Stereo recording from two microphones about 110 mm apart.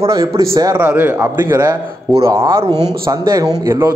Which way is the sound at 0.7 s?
15° right (ahead or behind).